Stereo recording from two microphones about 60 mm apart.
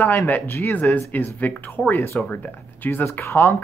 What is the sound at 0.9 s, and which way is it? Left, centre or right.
Speech, left.